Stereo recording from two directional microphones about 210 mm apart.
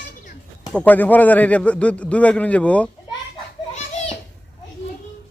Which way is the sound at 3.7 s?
30° left (ahead or behind).